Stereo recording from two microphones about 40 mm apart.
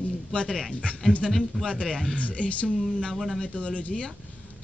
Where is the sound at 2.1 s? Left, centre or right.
Left.